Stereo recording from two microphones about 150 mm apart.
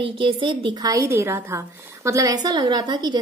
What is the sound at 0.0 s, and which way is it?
A woman's voice, 35° right (ahead or behind).